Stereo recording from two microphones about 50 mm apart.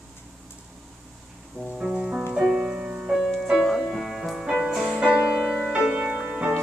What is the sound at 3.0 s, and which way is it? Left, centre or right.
Music, centre.